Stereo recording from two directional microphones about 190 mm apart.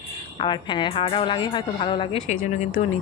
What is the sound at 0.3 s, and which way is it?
A woman's voice, 25° left (ahead or behind).